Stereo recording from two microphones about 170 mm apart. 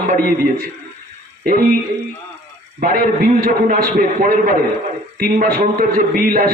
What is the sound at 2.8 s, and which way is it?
A man's voice, 55° right (ahead or behind).